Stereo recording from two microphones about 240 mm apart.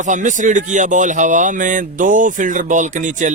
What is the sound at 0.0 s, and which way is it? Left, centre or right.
Speech, right.